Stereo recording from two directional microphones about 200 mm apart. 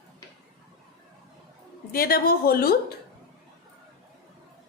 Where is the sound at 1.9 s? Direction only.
45° left (ahead or behind).